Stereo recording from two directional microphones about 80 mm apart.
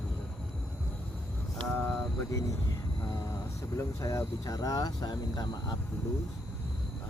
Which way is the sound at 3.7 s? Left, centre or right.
Left.